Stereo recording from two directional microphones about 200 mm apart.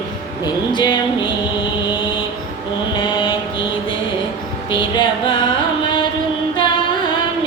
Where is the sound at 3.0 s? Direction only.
20° left (ahead or behind).